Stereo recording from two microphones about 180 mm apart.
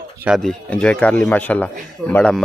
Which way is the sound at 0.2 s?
Centre (ahead or behind).